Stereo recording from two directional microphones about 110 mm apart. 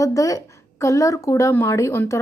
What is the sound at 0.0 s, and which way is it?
A woman's voice, 30° left (ahead or behind).